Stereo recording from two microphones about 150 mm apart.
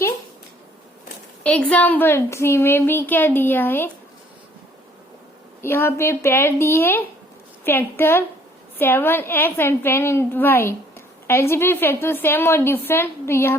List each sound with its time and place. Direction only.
1.5 s a woman's voice: 10° left (ahead or behind)
5.6 s a woman's voice: 15° left (ahead or behind)